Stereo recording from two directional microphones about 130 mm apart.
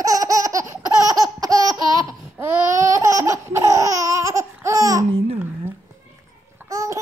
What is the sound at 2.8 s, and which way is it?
Laughter, 25° right (ahead or behind).